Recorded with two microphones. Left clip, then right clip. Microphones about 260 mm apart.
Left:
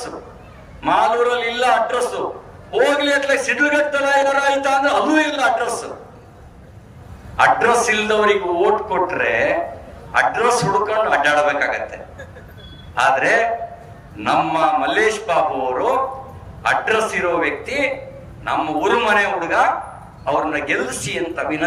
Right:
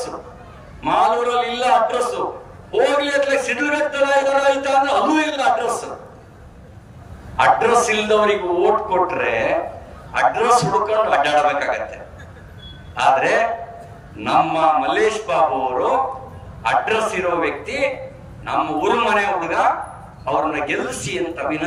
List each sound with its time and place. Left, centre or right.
0.8 s a man's voice: centre
7.3 s a man's voice: centre